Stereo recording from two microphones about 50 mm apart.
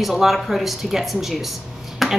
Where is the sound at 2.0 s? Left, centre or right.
Centre.